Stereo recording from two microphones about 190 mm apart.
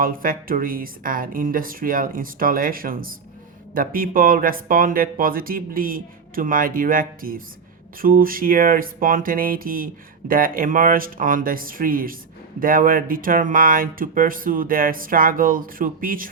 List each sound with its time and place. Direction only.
0.0 s speech: 50° right (ahead or behind)